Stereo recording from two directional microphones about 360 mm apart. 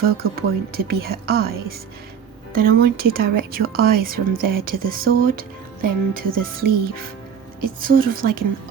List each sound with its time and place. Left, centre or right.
0.0 s speech: right